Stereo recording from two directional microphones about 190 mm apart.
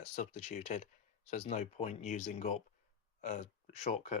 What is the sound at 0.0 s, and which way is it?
Speech, 40° left (ahead or behind).